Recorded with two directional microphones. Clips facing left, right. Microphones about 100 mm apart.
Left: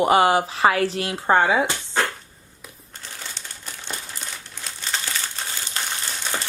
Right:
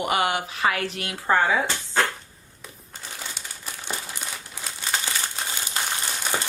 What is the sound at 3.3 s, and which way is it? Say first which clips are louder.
Crumpling: right 1 dB; 10° right (ahead or behind).